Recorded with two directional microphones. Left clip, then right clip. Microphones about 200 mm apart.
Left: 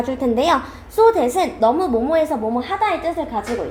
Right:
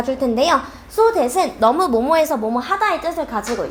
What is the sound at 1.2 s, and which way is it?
Speech, 35° right (ahead or behind).